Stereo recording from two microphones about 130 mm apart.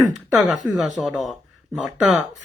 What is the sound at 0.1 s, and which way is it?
Speech, centre (ahead or behind).